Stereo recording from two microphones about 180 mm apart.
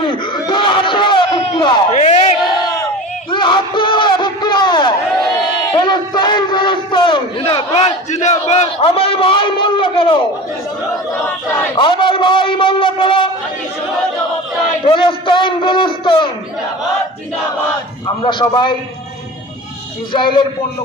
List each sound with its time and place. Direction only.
0.0 s crowd: 25° left (ahead or behind)
2.0 s a sound: 40° left (ahead or behind)
3.3 s crowd: 25° left (ahead or behind)
11.7 s a man's voice: 25° left (ahead or behind)
14.8 s a man's voice: 30° left (ahead or behind)
18.0 s a man's voice: 25° left (ahead or behind)
20.1 s a man's voice: 25° left (ahead or behind)